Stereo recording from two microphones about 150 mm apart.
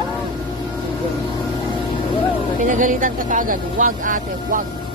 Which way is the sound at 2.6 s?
60° right (ahead or behind).